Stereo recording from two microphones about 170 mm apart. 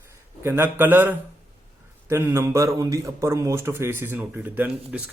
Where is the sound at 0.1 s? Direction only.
15° right (ahead or behind).